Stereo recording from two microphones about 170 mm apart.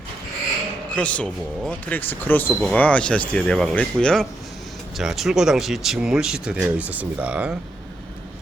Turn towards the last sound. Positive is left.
turn(degrees=-5)  # may be behind; listen again after turning